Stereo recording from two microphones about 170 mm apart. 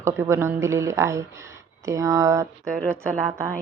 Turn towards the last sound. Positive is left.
turn(degrees=5)  # may be behind; listen again after turning